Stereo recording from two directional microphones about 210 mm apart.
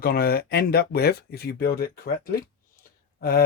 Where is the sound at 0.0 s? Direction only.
45° left (ahead or behind).